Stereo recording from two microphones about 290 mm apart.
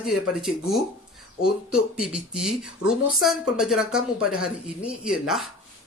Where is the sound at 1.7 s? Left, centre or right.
Centre.